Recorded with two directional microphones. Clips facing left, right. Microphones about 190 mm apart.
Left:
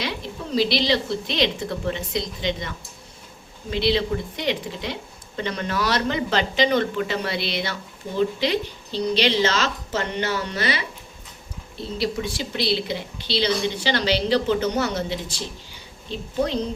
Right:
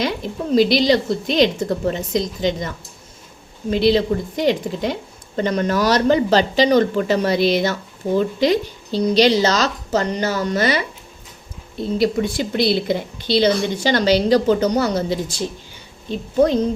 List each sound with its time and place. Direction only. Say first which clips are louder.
0.5 s a woman's voice: right 7 dB; 45° right (ahead or behind)
11.9 s a woman's voice: right 7 dB; 50° right (ahead or behind)